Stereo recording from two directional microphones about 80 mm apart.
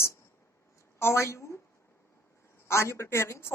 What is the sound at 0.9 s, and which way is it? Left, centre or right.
Speech, left.